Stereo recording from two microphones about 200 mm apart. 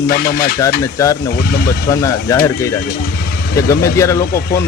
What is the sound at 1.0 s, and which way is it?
Speech, 15° left (ahead or behind).